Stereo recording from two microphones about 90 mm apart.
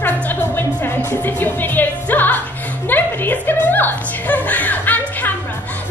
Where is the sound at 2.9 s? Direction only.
20° left (ahead or behind).